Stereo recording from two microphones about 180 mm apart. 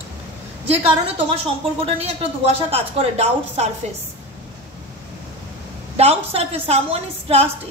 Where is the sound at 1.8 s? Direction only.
35° right (ahead or behind).